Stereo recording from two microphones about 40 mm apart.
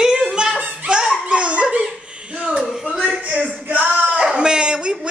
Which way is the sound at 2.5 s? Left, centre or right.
Centre.